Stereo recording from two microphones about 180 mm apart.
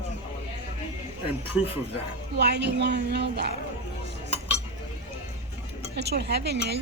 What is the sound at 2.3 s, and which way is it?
Speech, 70° right (ahead or behind).